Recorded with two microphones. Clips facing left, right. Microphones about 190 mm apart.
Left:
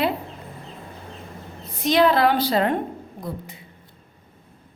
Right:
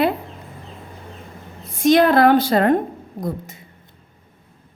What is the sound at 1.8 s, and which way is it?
A woman's voice, 50° right (ahead or behind).